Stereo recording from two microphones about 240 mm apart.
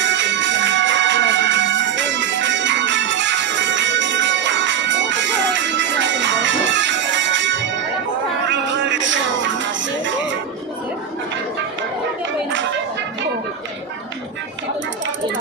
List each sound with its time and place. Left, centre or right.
0.0 s music: right